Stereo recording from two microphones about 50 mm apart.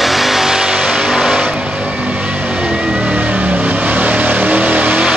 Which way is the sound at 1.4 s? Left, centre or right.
Right.